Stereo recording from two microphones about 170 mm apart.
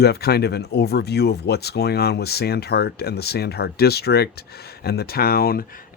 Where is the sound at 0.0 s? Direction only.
70° left (ahead or behind).